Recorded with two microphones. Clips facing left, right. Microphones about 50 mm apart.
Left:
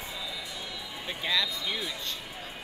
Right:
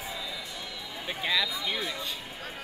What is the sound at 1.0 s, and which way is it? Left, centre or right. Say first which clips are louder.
Speech: right 1 dB; centre.